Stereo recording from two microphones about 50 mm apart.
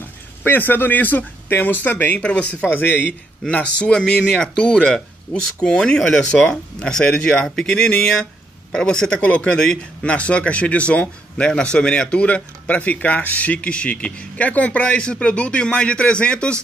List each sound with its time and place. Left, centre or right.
0.4 s speech: left
2.2 s speech: left
2.7 s speech: left
3.4 s speech: left
4.0 s speech: centre